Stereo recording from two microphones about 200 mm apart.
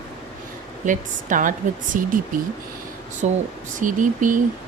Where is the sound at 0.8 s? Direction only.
40° right (ahead or behind).